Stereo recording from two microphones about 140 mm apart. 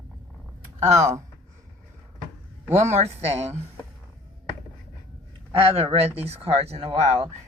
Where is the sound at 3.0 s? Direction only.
50° right (ahead or behind).